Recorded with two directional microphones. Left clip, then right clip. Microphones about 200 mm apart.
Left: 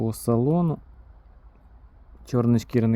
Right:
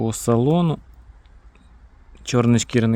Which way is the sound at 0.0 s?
5° right (ahead or behind).